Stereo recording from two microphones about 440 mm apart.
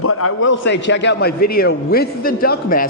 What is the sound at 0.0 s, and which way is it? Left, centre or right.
A man's voice, left.